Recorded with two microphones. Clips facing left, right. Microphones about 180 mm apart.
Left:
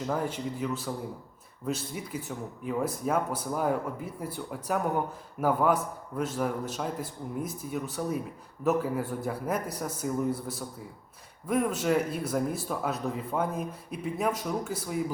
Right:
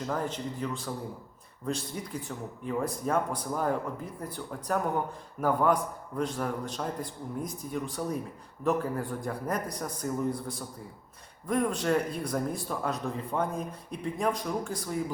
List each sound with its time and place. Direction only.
0.1 s a man's voice: 10° left (ahead or behind)